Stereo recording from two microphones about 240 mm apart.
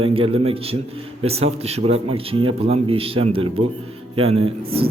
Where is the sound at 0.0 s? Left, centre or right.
Right.